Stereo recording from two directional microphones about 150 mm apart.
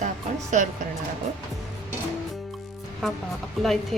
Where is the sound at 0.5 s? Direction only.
55° right (ahead or behind).